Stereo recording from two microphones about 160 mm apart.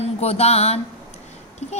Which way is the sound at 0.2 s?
40° left (ahead or behind).